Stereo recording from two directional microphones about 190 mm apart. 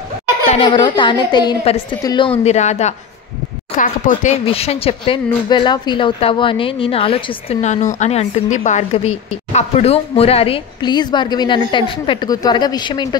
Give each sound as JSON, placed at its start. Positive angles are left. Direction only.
{"t": 0.5, "sound": "a woman's voice", "side_deg": 25}